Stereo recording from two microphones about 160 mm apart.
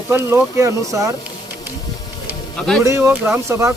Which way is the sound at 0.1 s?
15° right (ahead or behind).